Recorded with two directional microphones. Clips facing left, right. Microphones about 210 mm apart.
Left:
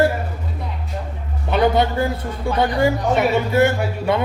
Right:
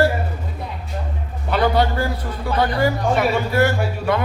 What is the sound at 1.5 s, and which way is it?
A woman's voice, 20° left (ahead or behind).